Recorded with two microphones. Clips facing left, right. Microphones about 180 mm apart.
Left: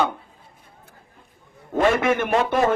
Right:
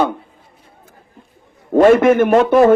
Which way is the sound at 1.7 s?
50° right (ahead or behind).